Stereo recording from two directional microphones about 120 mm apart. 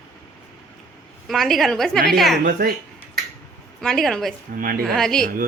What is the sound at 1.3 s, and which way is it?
A woman's voice, centre (ahead or behind).